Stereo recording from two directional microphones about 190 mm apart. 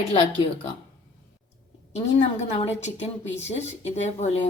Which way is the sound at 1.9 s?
35° left (ahead or behind).